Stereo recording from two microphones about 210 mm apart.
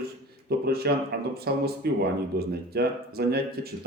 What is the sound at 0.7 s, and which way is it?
Speech, 50° right (ahead or behind).